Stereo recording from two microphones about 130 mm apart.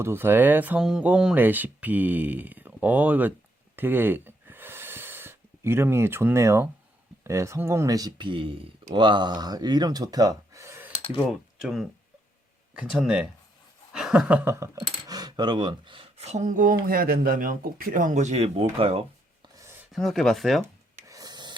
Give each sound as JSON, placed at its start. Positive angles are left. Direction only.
{"t": 0.0, "sound": "speech", "side_deg": -20}
{"t": 3.8, "sound": "snort", "side_deg": -15}
{"t": 7.3, "sound": "speech", "side_deg": -20}
{"t": 11.3, "sound": "speech", "side_deg": -5}
{"t": 14.8, "sound": "speech", "side_deg": -30}
{"t": 16.1, "sound": "speech", "side_deg": -55}
{"t": 18.8, "sound": "a sound", "side_deg": -50}
{"t": 19.9, "sound": "speech", "side_deg": 0}
{"t": 21.1, "sound": "a sound", "side_deg": -30}